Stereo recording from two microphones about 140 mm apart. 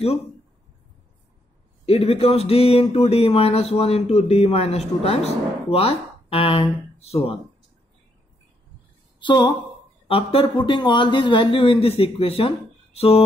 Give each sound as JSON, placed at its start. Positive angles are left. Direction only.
{"t": 1.9, "sound": "speech", "side_deg": 45}
{"t": 9.2, "sound": "speech", "side_deg": 30}